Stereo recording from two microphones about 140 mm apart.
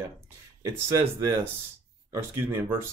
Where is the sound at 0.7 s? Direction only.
20° right (ahead or behind).